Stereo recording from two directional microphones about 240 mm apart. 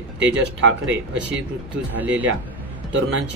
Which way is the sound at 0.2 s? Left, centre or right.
Right.